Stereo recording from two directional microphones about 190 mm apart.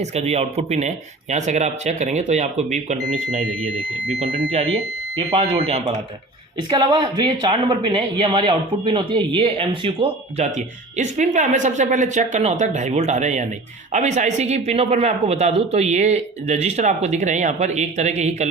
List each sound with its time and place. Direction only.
0.0 s speech: 35° right (ahead or behind)